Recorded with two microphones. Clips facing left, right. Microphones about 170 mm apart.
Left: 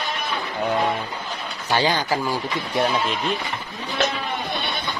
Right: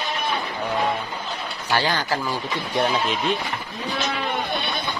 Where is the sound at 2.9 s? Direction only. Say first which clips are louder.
Right 1 dB; centre (ahead or behind).